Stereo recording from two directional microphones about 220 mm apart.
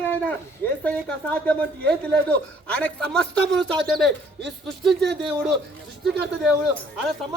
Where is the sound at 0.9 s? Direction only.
5° left (ahead or behind).